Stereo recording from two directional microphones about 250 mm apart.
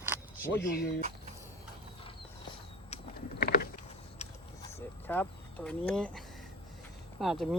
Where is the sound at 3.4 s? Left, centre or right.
Left.